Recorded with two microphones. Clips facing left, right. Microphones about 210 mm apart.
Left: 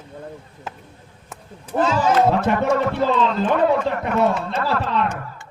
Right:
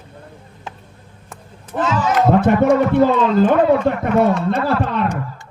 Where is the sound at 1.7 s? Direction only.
30° left (ahead or behind).